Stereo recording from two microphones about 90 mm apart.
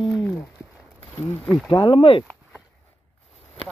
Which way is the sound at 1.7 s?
65° left (ahead or behind).